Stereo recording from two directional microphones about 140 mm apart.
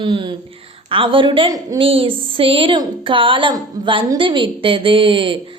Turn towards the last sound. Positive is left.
turn(degrees=-40)  # may be behind; listen again after turning